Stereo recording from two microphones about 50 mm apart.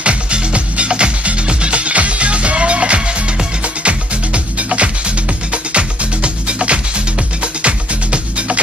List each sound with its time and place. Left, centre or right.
0.0 s music: right